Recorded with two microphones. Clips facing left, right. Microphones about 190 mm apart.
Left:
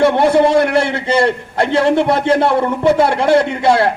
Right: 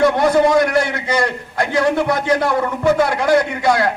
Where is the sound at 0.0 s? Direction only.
30° left (ahead or behind).